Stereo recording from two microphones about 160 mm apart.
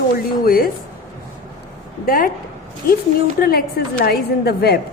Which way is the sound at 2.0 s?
65° left (ahead or behind).